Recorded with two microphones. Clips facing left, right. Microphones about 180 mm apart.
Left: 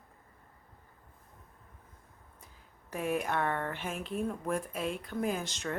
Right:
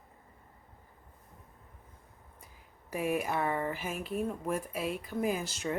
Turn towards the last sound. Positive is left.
turn(degrees=-10)  # may be behind; listen again after turning